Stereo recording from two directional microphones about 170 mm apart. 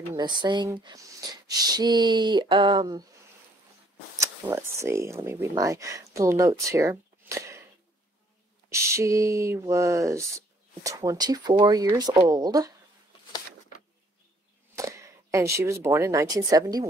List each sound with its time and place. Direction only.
0.1 s speech: 25° right (ahead or behind)
4.2 s speech: 15° right (ahead or behind)
8.6 s speech: 15° right (ahead or behind)
14.8 s speech: 15° right (ahead or behind)